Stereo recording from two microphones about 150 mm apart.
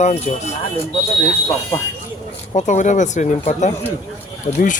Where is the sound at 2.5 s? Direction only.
55° left (ahead or behind).